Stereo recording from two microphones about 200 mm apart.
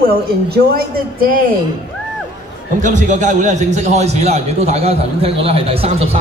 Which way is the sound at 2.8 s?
40° right (ahead or behind).